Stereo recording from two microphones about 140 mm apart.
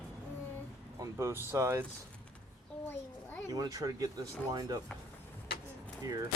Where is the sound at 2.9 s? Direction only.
15° left (ahead or behind).